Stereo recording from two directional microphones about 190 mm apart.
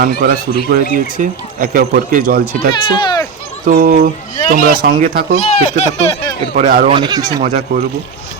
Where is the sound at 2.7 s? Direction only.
25° left (ahead or behind).